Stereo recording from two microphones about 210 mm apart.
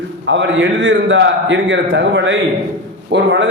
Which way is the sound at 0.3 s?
60° right (ahead or behind).